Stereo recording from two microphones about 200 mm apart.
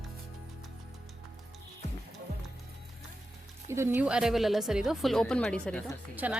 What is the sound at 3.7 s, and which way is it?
A woman's voice, 10° right (ahead or behind).